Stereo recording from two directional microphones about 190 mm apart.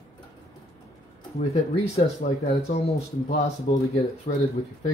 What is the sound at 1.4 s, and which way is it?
Speech, 35° left (ahead or behind).